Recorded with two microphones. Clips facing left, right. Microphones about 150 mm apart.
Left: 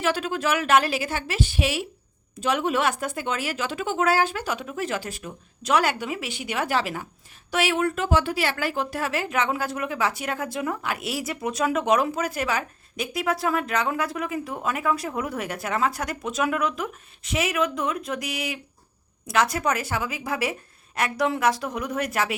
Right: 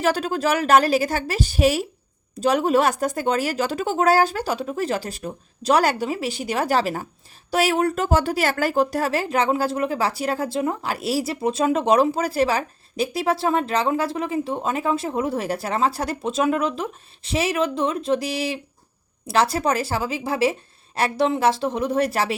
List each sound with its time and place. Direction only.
0.0 s speech: 40° right (ahead or behind)